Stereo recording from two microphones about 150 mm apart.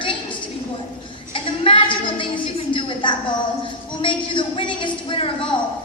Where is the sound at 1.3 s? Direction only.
35° left (ahead or behind).